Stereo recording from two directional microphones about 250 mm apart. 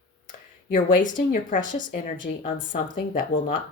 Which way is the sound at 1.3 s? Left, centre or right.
Left.